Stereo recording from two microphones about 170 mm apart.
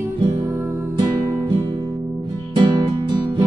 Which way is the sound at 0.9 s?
25° right (ahead or behind).